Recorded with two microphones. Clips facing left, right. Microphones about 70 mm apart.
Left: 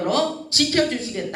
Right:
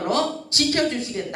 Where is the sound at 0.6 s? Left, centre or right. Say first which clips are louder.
Left 2 dB; left.